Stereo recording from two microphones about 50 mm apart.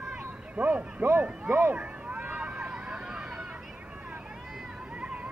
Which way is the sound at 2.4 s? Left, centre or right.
Centre.